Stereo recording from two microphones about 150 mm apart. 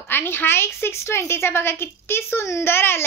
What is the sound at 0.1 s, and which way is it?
A woman's voice, 15° left (ahead or behind).